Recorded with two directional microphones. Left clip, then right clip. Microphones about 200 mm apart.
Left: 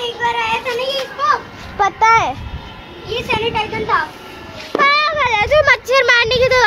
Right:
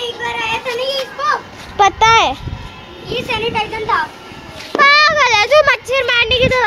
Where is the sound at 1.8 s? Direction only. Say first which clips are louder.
Right 2 dB; 35° right (ahead or behind).